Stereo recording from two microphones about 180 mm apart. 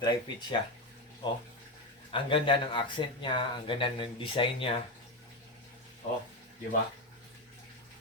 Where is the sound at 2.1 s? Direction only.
30° left (ahead or behind).